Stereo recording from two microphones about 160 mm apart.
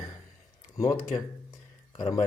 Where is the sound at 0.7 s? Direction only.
20° left (ahead or behind).